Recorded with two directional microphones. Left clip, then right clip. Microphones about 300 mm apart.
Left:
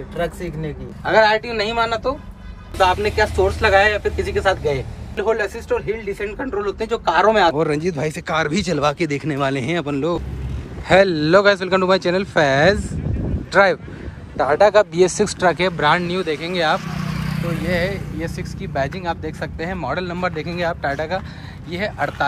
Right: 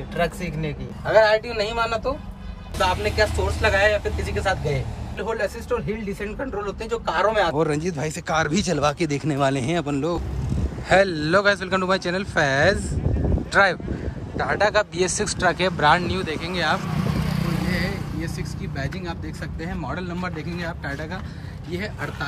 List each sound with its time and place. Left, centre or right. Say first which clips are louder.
0.1 s a man's voice: even; centre
16.8 s vehicle: even; right
17.6 s a man's voice: left 6 dB; centre